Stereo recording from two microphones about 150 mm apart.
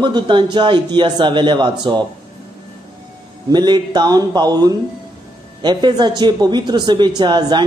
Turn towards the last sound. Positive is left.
turn(degrees=-30)  # may be behind; listen again after turning